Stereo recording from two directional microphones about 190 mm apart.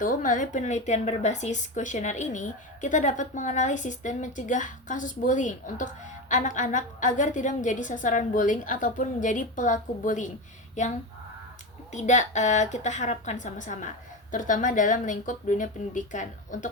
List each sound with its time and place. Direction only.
0.0 s speech: 45° left (ahead or behind)
11.9 s a woman's voice: 40° left (ahead or behind)